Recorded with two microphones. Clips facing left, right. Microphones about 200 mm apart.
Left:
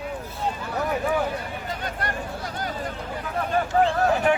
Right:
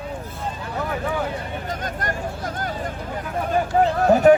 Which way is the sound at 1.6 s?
45° right (ahead or behind).